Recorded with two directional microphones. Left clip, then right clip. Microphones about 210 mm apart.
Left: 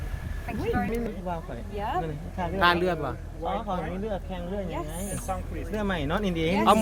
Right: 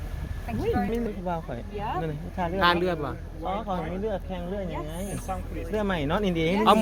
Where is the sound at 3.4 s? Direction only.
30° right (ahead or behind).